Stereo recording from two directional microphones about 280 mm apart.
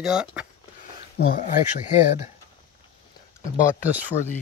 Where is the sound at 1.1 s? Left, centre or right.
Left.